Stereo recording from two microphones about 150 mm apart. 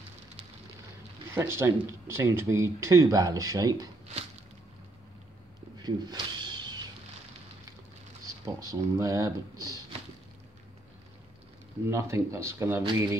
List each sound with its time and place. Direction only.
1.3 s speech: 15° right (ahead or behind)
5.8 s a sound: 30° right (ahead or behind)
8.5 s speech: 20° right (ahead or behind)
11.9 s speech: 20° right (ahead or behind)